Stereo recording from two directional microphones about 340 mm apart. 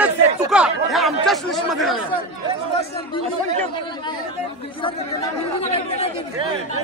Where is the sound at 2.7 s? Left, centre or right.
Centre.